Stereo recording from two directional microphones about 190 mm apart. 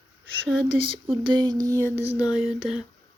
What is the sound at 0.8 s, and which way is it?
Speech, 25° right (ahead or behind).